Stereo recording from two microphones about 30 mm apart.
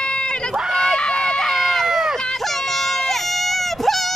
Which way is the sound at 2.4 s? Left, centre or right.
Centre.